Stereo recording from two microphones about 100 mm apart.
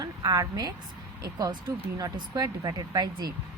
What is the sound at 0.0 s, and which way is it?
A woman's voice, 40° right (ahead or behind).